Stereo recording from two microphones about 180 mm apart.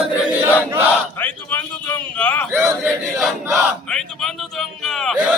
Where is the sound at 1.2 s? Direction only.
10° left (ahead or behind).